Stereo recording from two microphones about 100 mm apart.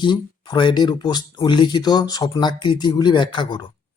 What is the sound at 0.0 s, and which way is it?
Speech, 50° left (ahead or behind).